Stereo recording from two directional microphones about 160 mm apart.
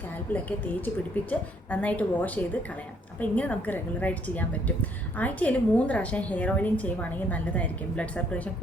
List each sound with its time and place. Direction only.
0.3 s a woman's voice: 10° left (ahead or behind)